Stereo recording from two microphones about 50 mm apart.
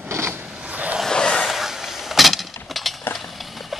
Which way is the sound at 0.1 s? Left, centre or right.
Right.